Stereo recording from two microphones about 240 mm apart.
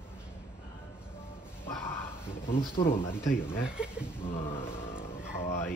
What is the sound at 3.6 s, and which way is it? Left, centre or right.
Speech, centre.